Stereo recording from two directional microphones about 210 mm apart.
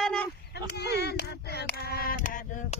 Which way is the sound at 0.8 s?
50° left (ahead or behind).